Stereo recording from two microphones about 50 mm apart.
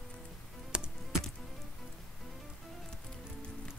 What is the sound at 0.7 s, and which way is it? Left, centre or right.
Music, centre.